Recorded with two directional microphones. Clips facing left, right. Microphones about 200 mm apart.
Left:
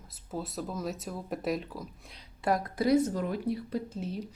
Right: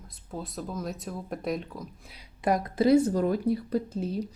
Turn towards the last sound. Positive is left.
turn(degrees=-35)  # may be behind; listen again after turning